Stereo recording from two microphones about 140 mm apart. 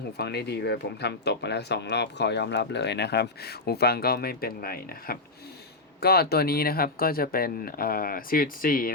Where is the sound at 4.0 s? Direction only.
90° left.